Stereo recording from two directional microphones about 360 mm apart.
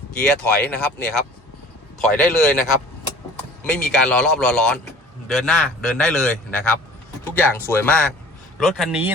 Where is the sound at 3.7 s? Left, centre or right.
Centre.